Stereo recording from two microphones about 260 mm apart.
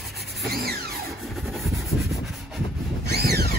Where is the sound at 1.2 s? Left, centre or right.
Centre.